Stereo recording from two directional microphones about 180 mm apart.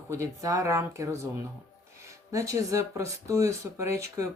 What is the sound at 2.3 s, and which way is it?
Speech, 20° right (ahead or behind).